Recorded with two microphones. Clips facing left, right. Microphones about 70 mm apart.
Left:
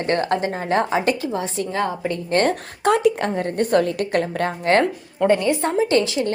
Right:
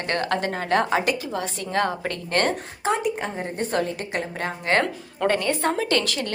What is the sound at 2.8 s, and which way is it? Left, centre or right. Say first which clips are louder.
Speech: left 7 dB; left.